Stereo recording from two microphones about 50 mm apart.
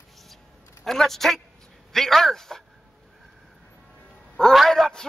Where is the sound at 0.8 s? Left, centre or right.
Centre.